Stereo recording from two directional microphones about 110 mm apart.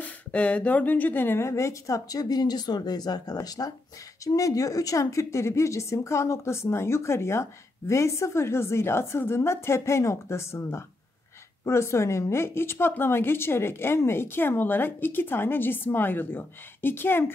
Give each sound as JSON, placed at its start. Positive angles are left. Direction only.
{"t": 0.0, "sound": "a woman's voice", "side_deg": 10}